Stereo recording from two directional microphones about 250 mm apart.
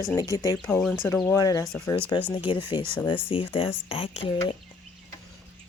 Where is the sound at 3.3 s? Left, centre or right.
Left.